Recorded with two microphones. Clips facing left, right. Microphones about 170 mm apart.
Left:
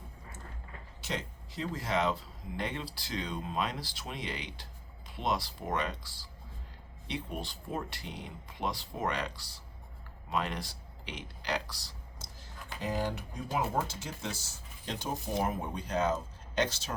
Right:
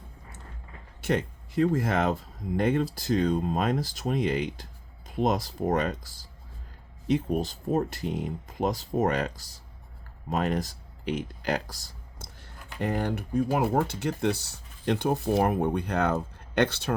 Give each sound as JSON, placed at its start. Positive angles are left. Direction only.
{"t": 1.0, "sound": "speech", "side_deg": -55}